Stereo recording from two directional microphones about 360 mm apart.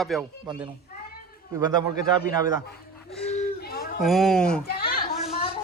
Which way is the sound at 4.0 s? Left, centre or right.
Centre.